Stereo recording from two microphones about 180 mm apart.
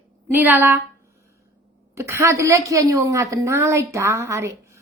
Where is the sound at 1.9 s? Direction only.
15° right (ahead or behind).